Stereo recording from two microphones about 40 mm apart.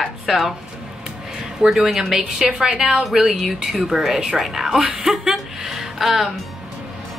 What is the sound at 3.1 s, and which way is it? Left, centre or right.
Speech, centre.